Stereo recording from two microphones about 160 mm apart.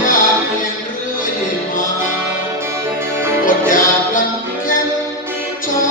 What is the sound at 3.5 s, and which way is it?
Music, 55° left (ahead or behind).